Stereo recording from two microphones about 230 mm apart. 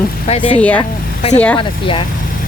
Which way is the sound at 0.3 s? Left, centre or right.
Left.